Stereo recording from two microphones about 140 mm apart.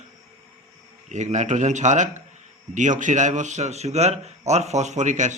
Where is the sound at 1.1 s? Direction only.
55° right (ahead or behind).